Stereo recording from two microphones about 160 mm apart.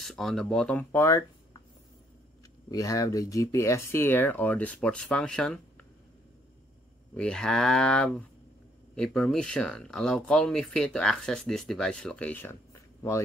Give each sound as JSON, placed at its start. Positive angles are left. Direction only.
{"t": 0.0, "sound": "speech", "side_deg": 0}
{"t": 2.7, "sound": "speech", "side_deg": 20}
{"t": 7.2, "sound": "speech", "side_deg": 5}